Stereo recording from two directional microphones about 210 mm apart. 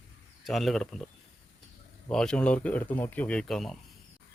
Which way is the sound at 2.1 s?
5° left (ahead or behind).